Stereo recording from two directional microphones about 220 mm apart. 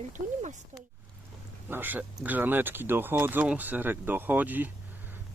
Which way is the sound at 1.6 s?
10° right (ahead or behind).